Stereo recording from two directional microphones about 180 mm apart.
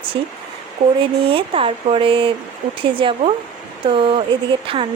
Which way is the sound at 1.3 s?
30° right (ahead or behind).